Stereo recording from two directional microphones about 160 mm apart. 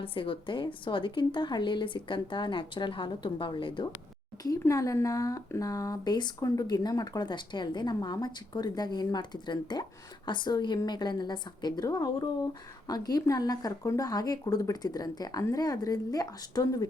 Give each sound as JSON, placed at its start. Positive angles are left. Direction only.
{"t": 0.0, "sound": "a woman's voice", "side_deg": 35}
{"t": 4.4, "sound": "speech", "side_deg": 20}